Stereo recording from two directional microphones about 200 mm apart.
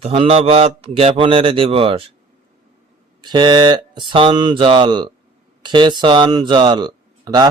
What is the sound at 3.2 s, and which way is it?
Speech, 20° right (ahead or behind).